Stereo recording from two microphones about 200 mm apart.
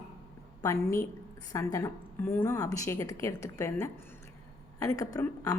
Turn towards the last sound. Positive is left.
turn(degrees=15)  # may be behind; listen again after turning